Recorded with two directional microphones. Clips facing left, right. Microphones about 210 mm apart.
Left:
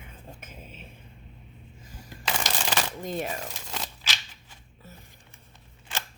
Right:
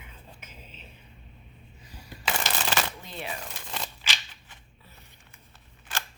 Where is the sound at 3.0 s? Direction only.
45° left (ahead or behind).